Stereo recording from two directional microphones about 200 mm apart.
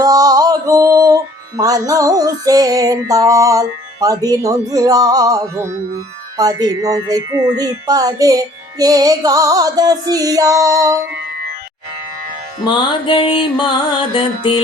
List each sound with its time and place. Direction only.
0.0 s music: 20° right (ahead or behind)
12.6 s mantra: 25° left (ahead or behind)